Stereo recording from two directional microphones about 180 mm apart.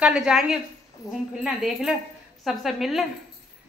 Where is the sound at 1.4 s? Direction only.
Centre (ahead or behind).